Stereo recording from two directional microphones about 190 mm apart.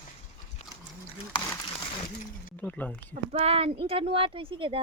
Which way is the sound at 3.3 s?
30° right (ahead or behind).